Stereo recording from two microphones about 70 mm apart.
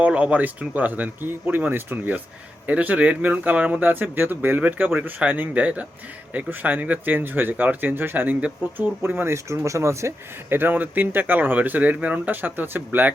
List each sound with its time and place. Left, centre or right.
0.0 s speech: centre
9.0 s speech: right
10.5 s speech: right